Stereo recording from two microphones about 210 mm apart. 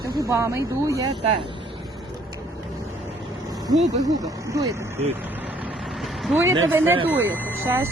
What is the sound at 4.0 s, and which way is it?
Speech, 15° right (ahead or behind).